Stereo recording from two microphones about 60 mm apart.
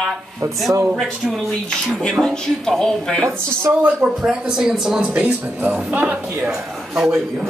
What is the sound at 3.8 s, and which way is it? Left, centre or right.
Speech, right.